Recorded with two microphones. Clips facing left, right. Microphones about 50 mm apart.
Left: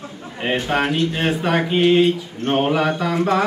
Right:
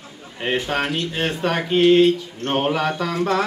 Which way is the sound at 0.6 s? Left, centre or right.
Centre.